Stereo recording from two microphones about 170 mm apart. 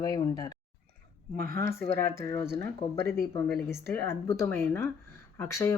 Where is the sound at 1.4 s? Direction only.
60° right (ahead or behind).